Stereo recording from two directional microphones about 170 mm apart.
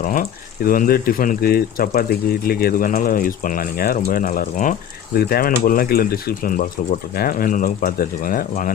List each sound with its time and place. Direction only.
0.0 s speech: 55° left (ahead or behind)